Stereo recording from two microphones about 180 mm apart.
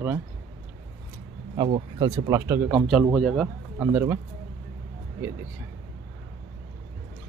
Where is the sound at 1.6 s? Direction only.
25° right (ahead or behind).